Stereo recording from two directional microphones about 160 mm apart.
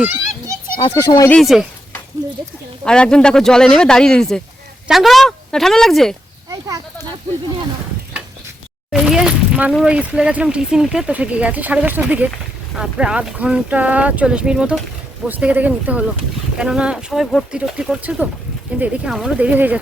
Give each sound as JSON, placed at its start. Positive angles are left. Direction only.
{"t": 0.8, "sound": "speech", "side_deg": 30}
{"t": 1.3, "sound": "speech", "side_deg": 0}
{"t": 2.8, "sound": "speech", "side_deg": 5}
{"t": 8.9, "sound": "speech", "side_deg": 0}